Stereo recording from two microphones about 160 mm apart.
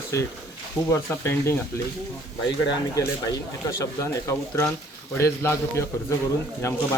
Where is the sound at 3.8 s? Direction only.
20° left (ahead or behind).